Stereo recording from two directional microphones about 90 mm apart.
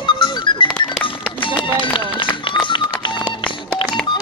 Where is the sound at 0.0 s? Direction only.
60° left (ahead or behind).